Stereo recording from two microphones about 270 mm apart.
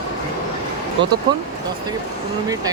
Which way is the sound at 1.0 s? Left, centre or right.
Right.